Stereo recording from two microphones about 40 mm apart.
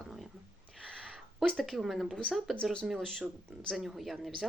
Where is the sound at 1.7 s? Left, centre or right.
Centre.